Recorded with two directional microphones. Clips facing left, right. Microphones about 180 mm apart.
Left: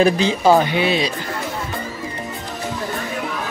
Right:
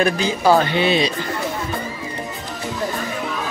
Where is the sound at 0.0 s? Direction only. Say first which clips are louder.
Left 3 dB; 30° left (ahead or behind).